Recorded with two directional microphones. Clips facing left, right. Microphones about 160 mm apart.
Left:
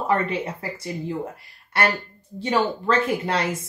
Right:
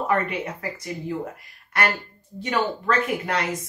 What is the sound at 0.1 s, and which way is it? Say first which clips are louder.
Speech: left 3 dB; 30° left (ahead or behind).